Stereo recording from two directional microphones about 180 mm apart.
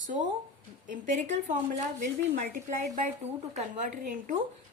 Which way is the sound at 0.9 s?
45° right (ahead or behind).